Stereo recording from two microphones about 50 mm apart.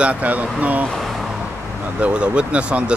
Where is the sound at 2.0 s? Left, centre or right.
Right.